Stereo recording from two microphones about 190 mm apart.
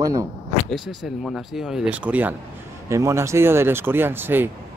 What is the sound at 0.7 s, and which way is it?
Speech, centre (ahead or behind).